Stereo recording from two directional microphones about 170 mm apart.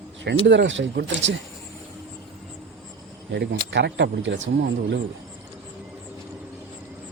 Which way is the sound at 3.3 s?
90° right.